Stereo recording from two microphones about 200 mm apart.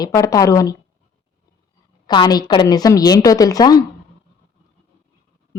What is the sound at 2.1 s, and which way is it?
A woman's voice, 20° left (ahead or behind).